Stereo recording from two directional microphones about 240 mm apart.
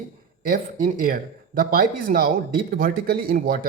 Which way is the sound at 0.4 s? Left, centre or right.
Right.